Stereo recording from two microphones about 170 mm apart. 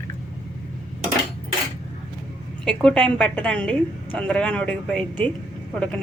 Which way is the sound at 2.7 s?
5° left (ahead or behind).